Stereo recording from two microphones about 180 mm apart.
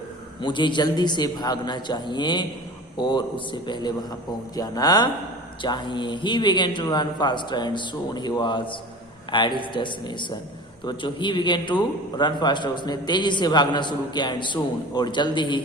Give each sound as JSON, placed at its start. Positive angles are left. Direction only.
{"t": 0.4, "sound": "a man's voice", "side_deg": 25}